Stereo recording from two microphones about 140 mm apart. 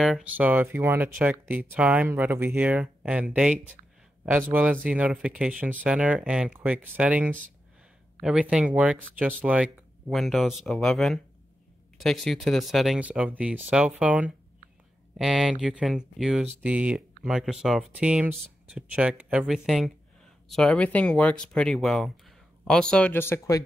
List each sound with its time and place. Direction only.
0.0 s speech: 5° right (ahead or behind); by 23.6 s 20° left (ahead or behind)